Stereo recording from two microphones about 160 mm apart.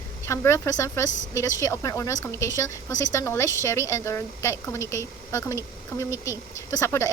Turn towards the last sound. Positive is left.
turn(degrees=15)  # may be behind; listen again after turning